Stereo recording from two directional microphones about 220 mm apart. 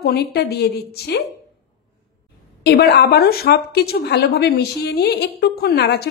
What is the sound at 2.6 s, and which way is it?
A woman's voice, 45° left (ahead or behind).